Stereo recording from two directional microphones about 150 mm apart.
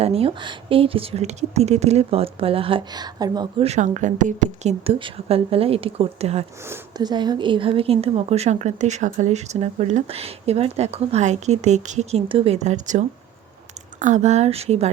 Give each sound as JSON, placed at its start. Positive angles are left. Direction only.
{"t": 0.0, "sound": "speech", "side_deg": -40}
{"t": 3.6, "sound": "a woman's voice", "side_deg": -50}
{"t": 4.8, "sound": "speech", "side_deg": -35}
{"t": 6.9, "sound": "a woman's voice", "side_deg": -30}